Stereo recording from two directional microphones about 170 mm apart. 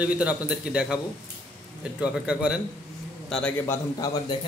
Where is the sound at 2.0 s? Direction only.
5° right (ahead or behind).